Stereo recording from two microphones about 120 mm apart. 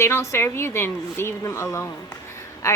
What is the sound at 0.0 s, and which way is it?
A woman's voice, 20° left (ahead or behind).